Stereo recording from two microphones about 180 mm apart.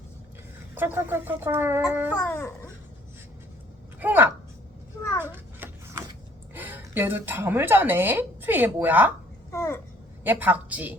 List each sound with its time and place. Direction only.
0.8 s speech: 10° right (ahead or behind)
2.2 s a child's voice: 10° left (ahead or behind)
4.0 s speech: 10° right (ahead or behind)
5.2 s a sound: 10° right (ahead or behind)
6.5 s speech: 10° right (ahead or behind)
9.5 s a child's voice: 15° left (ahead or behind)
10.2 s speech: 10° right (ahead or behind)